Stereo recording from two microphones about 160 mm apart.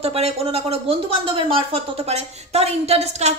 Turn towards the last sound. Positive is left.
turn(degrees=-40)  # may be behind; listen again after turning